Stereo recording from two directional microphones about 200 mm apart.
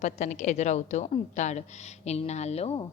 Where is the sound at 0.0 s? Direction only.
35° left (ahead or behind).